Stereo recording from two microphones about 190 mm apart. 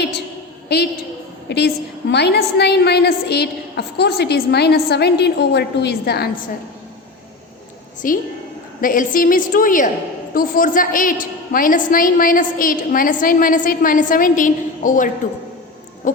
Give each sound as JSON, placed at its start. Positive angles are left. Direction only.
{"t": 0.7, "sound": "a woman's voice", "side_deg": 55}
{"t": 8.0, "sound": "a woman's voice", "side_deg": 45}
{"t": 16.0, "sound": "owl", "side_deg": 40}